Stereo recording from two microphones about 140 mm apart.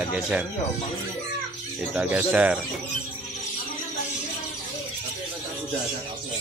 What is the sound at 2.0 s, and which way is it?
Speech, 10° right (ahead or behind).